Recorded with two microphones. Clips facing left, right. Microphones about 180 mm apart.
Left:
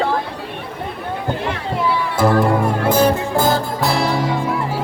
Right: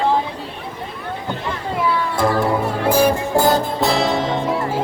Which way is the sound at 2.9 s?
10° right (ahead or behind).